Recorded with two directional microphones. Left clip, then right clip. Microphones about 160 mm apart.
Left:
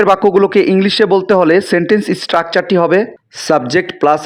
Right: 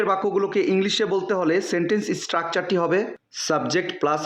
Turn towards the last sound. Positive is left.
turn(degrees=45)  # may be behind; listen again after turning